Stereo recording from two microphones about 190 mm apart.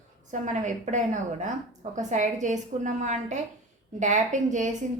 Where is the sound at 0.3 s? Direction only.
40° right (ahead or behind).